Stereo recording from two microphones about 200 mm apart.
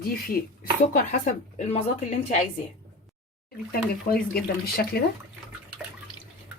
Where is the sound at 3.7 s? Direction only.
50° left (ahead or behind).